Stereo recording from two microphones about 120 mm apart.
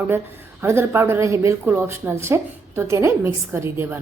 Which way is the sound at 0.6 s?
20° right (ahead or behind).